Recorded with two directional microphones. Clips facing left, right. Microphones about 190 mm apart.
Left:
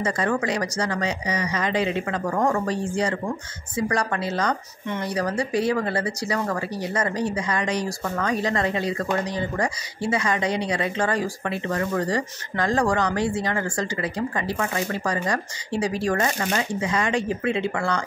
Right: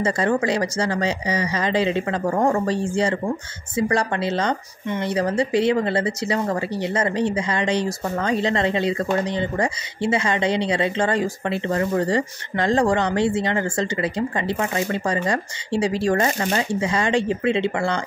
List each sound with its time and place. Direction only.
0.0 s speech: 30° right (ahead or behind)